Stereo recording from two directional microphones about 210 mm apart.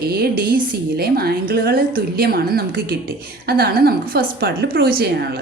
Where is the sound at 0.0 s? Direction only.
45° right (ahead or behind).